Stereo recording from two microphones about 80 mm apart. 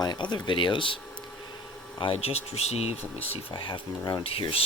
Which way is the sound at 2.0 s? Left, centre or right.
Left.